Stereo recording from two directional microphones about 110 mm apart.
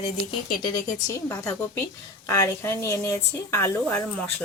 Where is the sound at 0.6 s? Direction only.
30° left (ahead or behind).